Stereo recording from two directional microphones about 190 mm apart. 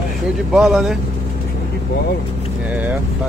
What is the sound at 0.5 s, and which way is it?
Speech, centre (ahead or behind).